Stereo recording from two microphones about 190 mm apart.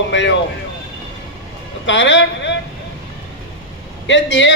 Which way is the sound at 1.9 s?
70° left (ahead or behind).